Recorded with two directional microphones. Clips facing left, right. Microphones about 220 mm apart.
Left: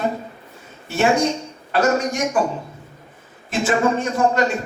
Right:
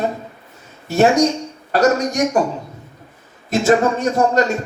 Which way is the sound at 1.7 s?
40° right (ahead or behind).